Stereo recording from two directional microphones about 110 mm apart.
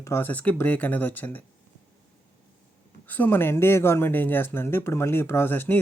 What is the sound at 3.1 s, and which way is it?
Speech, 15° left (ahead or behind).